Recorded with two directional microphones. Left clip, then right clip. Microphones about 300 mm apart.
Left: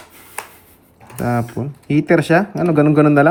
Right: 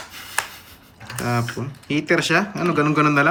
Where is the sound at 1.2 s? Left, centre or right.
Centre.